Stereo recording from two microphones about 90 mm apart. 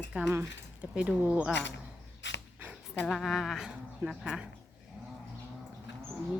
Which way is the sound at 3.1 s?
Centre (ahead or behind).